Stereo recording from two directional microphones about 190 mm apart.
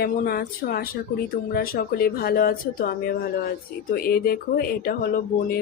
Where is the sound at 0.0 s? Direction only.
55° left (ahead or behind).